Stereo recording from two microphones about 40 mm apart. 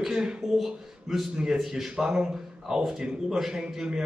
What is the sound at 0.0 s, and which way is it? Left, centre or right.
Speech, centre.